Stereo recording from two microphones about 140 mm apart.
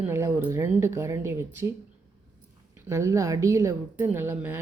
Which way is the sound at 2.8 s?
20° right (ahead or behind).